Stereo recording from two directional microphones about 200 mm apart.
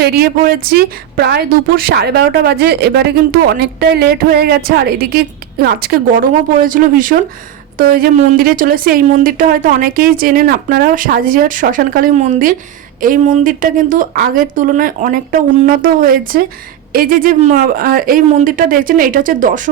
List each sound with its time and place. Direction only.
0.0 s a woman's voice: 50° right (ahead or behind)